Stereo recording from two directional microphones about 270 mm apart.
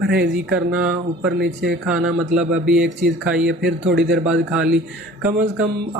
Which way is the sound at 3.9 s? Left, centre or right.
Right.